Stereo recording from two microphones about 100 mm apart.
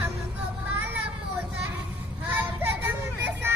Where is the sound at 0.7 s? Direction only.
20° right (ahead or behind).